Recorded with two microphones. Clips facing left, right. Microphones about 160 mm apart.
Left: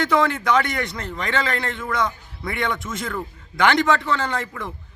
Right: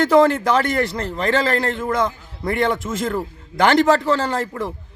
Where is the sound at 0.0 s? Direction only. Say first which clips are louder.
Right 6 dB; 40° right (ahead or behind).